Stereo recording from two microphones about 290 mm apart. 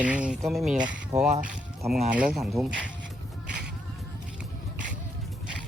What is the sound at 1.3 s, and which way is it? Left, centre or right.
Speech, right.